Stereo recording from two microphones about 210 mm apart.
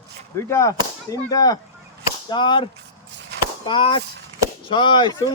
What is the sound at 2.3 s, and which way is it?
Speech, 20° left (ahead or behind).